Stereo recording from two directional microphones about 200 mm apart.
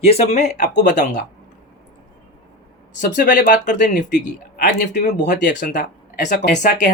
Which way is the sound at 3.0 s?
40° left (ahead or behind).